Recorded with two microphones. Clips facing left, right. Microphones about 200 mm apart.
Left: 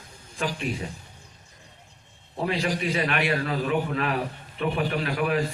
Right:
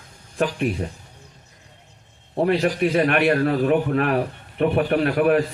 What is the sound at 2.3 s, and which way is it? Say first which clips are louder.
A man's voice: right 7 dB; 55° right (ahead or behind).